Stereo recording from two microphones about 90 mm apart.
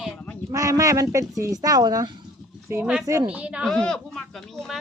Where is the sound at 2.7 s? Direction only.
30° right (ahead or behind).